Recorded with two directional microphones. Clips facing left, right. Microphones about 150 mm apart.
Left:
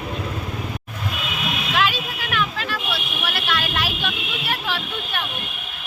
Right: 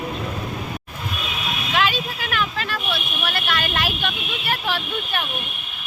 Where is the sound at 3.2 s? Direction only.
Centre (ahead or behind).